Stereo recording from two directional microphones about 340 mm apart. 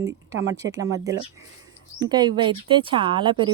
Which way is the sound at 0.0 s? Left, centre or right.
Centre.